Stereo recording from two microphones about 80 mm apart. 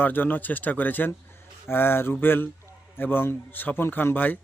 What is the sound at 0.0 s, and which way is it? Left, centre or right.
A man's voice, left.